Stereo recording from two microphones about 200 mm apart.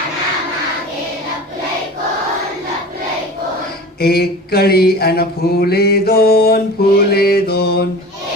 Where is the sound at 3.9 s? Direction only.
50° left (ahead or behind).